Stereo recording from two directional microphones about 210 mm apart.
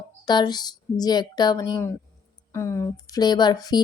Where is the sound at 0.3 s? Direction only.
20° left (ahead or behind).